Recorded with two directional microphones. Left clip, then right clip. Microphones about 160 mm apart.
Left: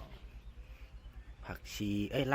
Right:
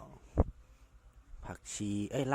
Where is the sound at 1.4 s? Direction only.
25° right (ahead or behind).